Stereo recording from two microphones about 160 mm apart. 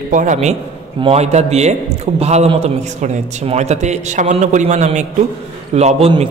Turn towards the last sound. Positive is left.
turn(degrees=-40)  # may be behind; listen again after turning